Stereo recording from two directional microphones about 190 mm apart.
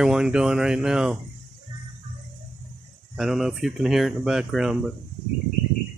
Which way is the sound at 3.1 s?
Centre (ahead or behind).